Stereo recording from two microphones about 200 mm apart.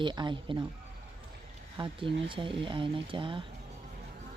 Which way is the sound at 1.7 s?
25° right (ahead or behind).